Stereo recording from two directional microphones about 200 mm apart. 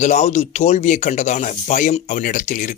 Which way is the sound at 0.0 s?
35° left (ahead or behind).